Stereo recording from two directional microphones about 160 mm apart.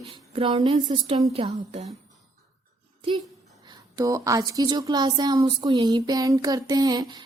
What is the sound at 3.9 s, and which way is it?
Speech, 20° right (ahead or behind).